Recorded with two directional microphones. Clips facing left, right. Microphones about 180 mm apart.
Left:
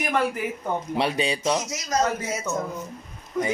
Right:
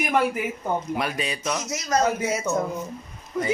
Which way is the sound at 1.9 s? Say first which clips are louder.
Right 1 dB; 60° right (ahead or behind).